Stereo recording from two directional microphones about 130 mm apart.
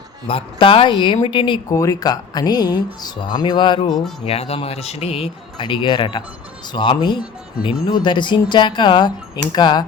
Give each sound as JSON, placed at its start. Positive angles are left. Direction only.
{"t": 0.3, "sound": "speech", "side_deg": 45}
{"t": 1.7, "sound": "speech", "side_deg": 25}
{"t": 4.3, "sound": "speech", "side_deg": 50}
{"t": 5.5, "sound": "speech", "side_deg": 35}